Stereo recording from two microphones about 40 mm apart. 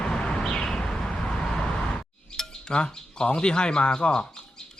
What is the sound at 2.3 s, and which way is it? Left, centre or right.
Speech, centre.